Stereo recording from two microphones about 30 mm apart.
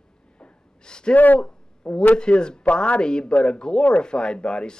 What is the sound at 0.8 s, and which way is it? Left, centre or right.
Speech, left.